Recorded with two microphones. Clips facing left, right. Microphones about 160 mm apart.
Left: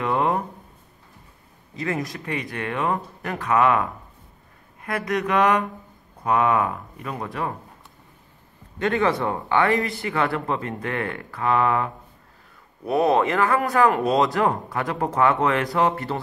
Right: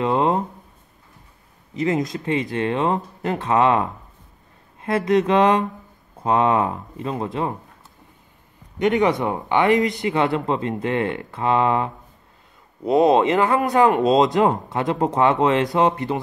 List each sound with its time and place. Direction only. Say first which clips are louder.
0.0 s a sound: right 3 dB; 20° right (ahead or behind)
1.8 s speech: right 6 dB; 20° right (ahead or behind)
8.7 s speech: right 3 dB; 15° right (ahead or behind)